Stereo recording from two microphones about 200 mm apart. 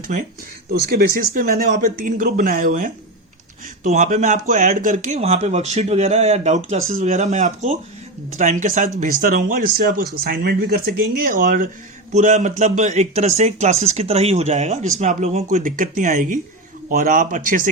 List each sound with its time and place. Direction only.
0.7 s a man's voice: 50° right (ahead or behind)